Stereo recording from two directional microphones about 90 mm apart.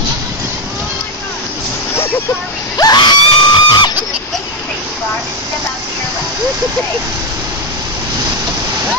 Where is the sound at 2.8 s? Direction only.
50° left (ahead or behind).